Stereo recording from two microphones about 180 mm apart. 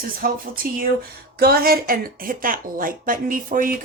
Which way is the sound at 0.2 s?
50° right (ahead or behind).